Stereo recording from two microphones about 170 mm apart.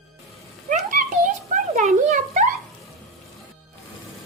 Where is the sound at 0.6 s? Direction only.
50° right (ahead or behind).